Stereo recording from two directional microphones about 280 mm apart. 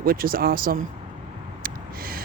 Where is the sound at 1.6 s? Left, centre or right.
Right.